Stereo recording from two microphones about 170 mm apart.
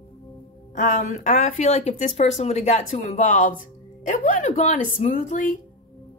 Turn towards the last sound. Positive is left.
turn(degrees=50)  # may be behind; listen again after turning